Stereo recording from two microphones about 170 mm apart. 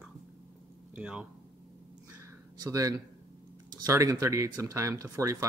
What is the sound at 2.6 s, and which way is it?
Speech, 20° right (ahead or behind).